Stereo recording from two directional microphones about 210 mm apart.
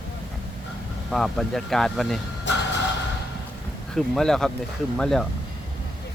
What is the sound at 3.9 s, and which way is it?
Speech, centre (ahead or behind).